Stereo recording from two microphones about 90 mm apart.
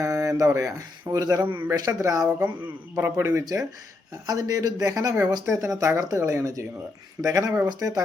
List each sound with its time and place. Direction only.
0.0 s a sound: 40° right (ahead or behind)
1.1 s speech: 40° right (ahead or behind)
1.5 s a man's voice: 20° right (ahead or behind)
2.0 s speech: 35° right (ahead or behind)